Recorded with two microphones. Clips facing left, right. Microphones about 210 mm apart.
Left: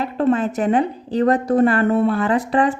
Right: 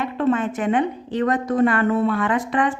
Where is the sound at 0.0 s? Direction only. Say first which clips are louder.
Left 2 dB; 35° left (ahead or behind).